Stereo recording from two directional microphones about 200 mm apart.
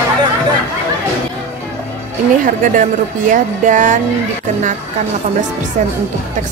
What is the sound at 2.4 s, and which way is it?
A woman's voice, 40° right (ahead or behind).